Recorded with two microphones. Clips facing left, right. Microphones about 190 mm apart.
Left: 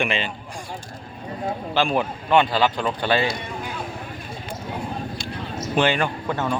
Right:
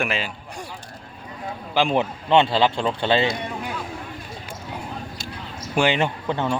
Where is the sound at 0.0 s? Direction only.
5° right (ahead or behind).